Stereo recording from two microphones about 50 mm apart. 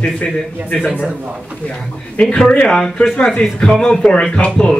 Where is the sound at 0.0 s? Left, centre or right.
Left.